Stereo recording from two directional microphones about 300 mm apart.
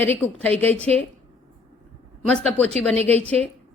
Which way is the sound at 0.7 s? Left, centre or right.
Right.